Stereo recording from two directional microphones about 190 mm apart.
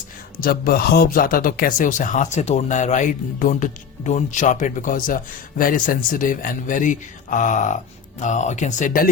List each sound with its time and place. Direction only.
0.3 s a man's voice: 50° left (ahead or behind)